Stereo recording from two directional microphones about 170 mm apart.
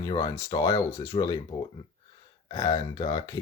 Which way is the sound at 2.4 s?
25° left (ahead or behind).